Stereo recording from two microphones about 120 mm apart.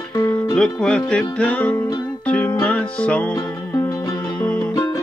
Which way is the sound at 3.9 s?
30° left (ahead or behind).